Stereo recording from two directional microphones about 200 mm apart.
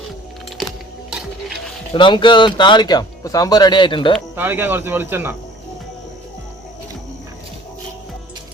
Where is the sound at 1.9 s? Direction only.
25° left (ahead or behind).